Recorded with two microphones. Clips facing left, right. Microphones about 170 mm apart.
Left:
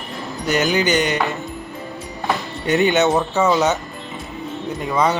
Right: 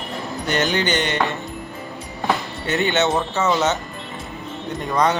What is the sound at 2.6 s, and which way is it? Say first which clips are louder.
Speech: left 4 dB; 15° left (ahead or behind).